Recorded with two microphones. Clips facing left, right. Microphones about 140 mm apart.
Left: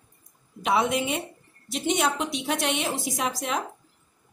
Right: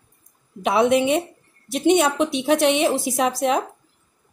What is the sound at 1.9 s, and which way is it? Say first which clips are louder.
Speech: right 8 dB; 65° right (ahead or behind).